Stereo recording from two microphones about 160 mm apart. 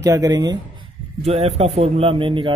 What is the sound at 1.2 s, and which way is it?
Speech, 40° right (ahead or behind).